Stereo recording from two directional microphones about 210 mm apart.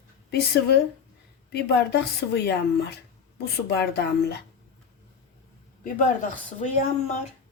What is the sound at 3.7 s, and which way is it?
Speech, 50° left (ahead or behind).